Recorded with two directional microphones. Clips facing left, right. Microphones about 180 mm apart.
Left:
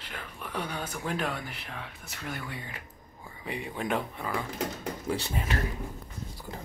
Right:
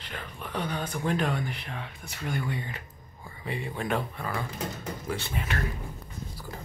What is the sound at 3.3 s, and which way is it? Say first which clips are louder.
Speech: right 2 dB; 15° left (ahead or behind).